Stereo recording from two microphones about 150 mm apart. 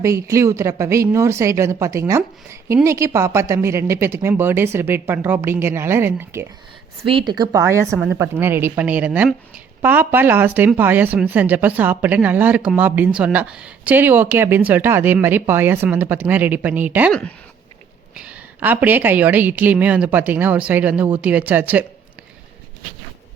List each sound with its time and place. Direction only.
0.0 s a woman's voice: 20° right (ahead or behind)
7.0 s a woman's voice: 35° right (ahead or behind); by 7.9 s 20° right (ahead or behind)
7.9 s a woman's voice: 5° right (ahead or behind)
17.1 s speech: 5° left (ahead or behind)
18.1 s speech: 10° right (ahead or behind)